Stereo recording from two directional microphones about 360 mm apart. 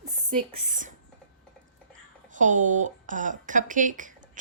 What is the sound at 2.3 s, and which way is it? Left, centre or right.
A woman's voice, right.